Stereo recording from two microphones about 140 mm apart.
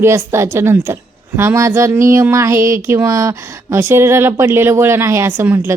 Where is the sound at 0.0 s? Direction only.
20° right (ahead or behind).